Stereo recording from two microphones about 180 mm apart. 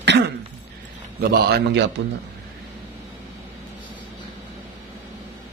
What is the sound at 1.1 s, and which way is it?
Speech, 60° right (ahead or behind).